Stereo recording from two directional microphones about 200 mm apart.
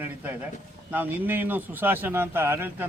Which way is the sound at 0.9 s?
10° right (ahead or behind).